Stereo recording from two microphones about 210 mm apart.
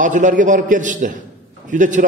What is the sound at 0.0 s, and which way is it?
A man's voice, 35° right (ahead or behind).